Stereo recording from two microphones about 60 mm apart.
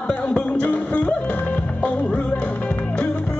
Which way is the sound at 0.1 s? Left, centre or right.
Left.